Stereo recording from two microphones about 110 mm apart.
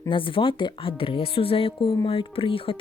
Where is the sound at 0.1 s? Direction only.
55° left (ahead or behind).